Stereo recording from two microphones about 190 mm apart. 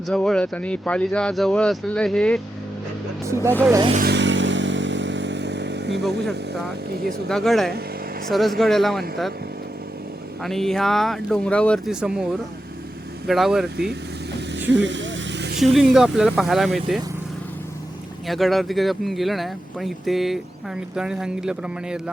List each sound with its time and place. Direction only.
0.1 s speech: 5° left (ahead or behind)
3.2 s speech: 15° right (ahead or behind)
4.1 s motorcycle: 70° right (ahead or behind)
6.0 s speech: centre (ahead or behind)
10.4 s speech: centre (ahead or behind)
14.7 s vehicle: 70° right (ahead or behind)
15.6 s speech: centre (ahead or behind)
18.3 s speech: centre (ahead or behind)